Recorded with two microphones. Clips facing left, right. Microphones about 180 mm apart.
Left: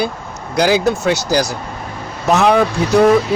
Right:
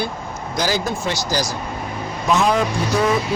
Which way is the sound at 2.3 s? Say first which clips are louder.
Left 5 dB; 65° left (ahead or behind).